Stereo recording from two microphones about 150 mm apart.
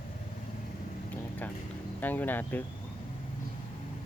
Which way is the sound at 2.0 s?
10° left (ahead or behind).